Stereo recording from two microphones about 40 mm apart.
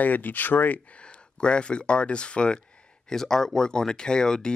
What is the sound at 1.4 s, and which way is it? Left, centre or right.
Speech, left.